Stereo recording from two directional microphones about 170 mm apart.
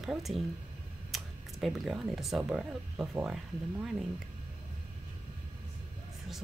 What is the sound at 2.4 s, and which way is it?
Speech, 5° right (ahead or behind).